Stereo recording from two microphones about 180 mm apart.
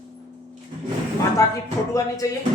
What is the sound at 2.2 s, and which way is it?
Speech, 20° left (ahead or behind).